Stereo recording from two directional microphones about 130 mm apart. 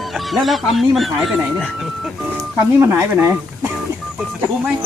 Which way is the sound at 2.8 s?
20° right (ahead or behind).